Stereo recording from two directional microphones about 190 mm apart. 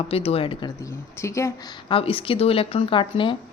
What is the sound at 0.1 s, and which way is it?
Speech, 30° left (ahead or behind).